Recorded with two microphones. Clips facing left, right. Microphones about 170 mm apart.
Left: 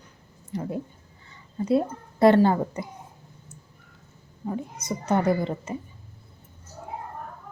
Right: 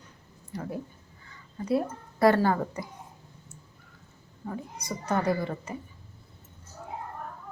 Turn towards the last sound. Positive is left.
turn(degrees=20)  # may be behind; listen again after turning